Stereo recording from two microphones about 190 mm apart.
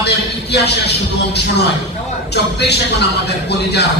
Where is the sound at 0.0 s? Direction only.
60° left (ahead or behind).